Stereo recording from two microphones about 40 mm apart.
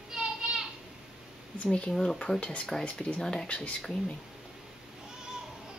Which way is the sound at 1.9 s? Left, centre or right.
Centre.